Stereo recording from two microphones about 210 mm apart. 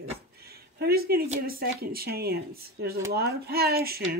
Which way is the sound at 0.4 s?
50° right (ahead or behind).